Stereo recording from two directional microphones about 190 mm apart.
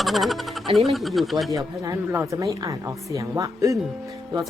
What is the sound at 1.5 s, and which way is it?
Speech, 15° right (ahead or behind).